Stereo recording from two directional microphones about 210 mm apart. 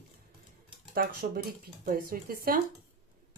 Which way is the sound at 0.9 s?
45° right (ahead or behind).